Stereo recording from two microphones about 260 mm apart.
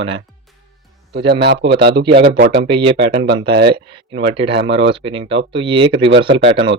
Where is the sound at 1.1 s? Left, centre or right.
Right.